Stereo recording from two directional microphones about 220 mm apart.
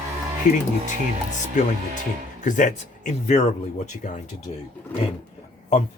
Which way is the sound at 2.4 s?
35° left (ahead or behind).